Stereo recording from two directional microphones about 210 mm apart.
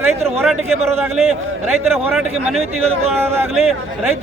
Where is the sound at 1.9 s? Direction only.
Centre (ahead or behind).